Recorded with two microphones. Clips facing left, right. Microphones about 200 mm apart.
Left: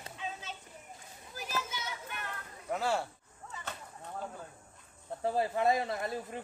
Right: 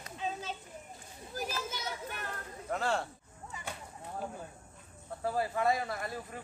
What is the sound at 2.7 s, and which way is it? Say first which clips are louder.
Speech: left 1 dB; 5° left (ahead or behind).